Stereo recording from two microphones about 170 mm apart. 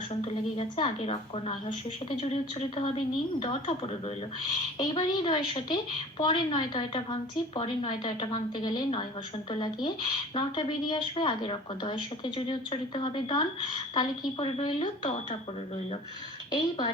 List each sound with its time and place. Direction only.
0.5 s a woman's voice: 35° left (ahead or behind)